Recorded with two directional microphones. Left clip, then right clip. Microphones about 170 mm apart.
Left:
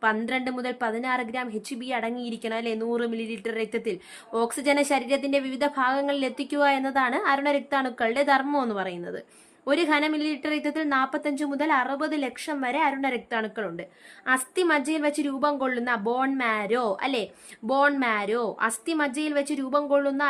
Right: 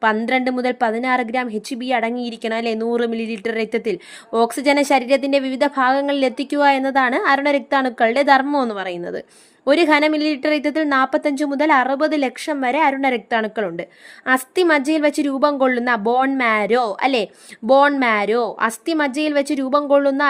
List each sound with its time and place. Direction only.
0.0 s a woman's voice: 40° right (ahead or behind)